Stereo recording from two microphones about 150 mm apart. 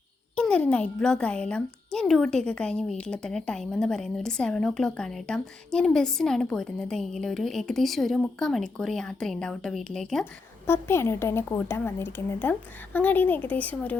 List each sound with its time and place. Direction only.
0.3 s a child's voice: 5° left (ahead or behind)
10.7 s a woman's voice: 15° left (ahead or behind)